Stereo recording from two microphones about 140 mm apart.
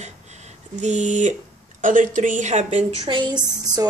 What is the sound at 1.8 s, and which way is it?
Speech, 70° right (ahead or behind).